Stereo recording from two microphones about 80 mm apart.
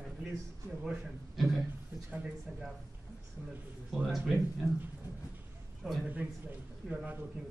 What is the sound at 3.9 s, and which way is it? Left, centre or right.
Speech, centre.